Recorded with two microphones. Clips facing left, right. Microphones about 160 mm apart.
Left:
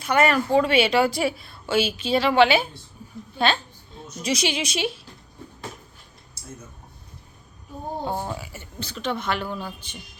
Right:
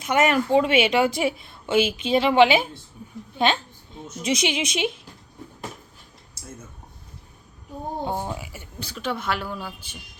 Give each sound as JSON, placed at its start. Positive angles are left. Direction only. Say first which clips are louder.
{"t": 0.0, "sound": "a woman's voice", "louder": "even", "side_deg": -20}
{"t": 3.3, "sound": "a sound", "louder": "right 1 dB", "side_deg": -20}
{"t": 4.2, "sound": "a woman's voice", "louder": "right 1 dB", "side_deg": -25}
{"t": 8.0, "sound": "speech", "louder": "even", "side_deg": -15}